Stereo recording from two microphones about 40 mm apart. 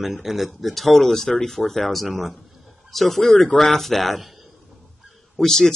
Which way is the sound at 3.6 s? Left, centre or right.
Centre.